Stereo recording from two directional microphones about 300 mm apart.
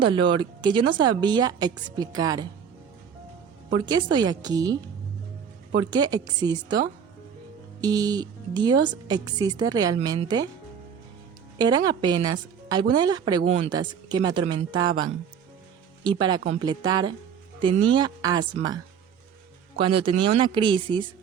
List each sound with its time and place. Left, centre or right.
0.0 s speech: centre
3.7 s speech: centre
11.5 s speech: centre
16.0 s speech: centre